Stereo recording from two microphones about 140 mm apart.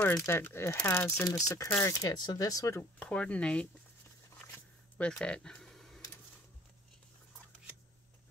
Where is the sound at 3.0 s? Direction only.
10° left (ahead or behind).